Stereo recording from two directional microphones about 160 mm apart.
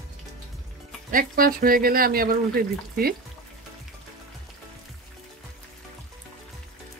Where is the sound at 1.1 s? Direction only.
65° right (ahead or behind).